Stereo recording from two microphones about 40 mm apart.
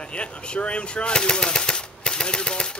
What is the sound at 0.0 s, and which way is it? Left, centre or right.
Speech, left.